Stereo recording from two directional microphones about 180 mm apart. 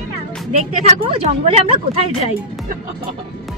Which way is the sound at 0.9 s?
35° right (ahead or behind).